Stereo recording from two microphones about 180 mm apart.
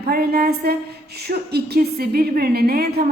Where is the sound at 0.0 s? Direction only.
60° right (ahead or behind).